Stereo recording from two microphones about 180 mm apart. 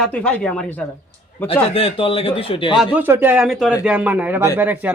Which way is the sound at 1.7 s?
30° left (ahead or behind).